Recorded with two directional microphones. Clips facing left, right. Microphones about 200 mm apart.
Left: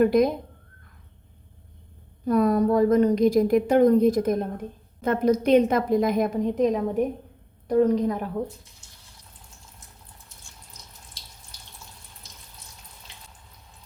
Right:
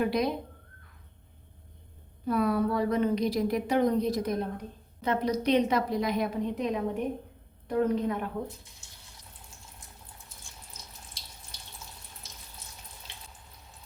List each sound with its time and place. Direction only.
0.0 s a woman's voice: 45° left (ahead or behind)
2.2 s a woman's voice: 45° left (ahead or behind)